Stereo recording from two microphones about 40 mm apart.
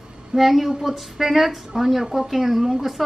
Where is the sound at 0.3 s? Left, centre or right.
Centre.